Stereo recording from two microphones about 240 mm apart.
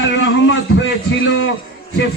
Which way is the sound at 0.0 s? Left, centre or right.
Left.